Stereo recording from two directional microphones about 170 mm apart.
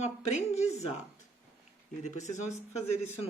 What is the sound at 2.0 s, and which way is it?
Speech, 45° left (ahead or behind).